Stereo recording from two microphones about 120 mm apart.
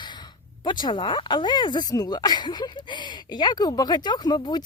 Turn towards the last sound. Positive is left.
turn(degrees=35)  # may be behind; listen again after turning